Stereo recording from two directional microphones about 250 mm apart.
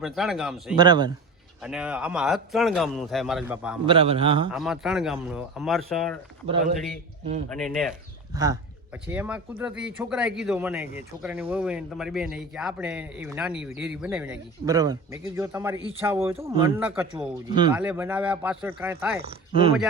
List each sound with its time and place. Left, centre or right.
0.0 s speech: centre
0.8 s speech: centre
1.6 s speech: centre
3.8 s a man's voice: right
4.5 s speech: centre
7.5 s speech: centre
8.3 s speech: centre
17.5 s speech: centre
17.7 s speech: centre
19.2 s a man's voice: right